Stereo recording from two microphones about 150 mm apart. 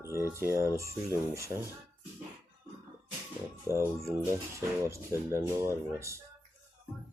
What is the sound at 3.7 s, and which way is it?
Filing, 20° right (ahead or behind).